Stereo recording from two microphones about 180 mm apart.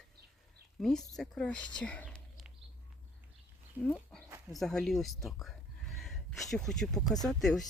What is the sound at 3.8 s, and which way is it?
Speech, 5° left (ahead or behind).